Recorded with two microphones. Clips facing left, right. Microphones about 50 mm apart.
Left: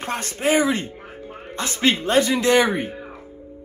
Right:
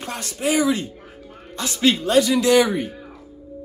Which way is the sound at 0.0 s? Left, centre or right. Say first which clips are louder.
Left 2 dB; left.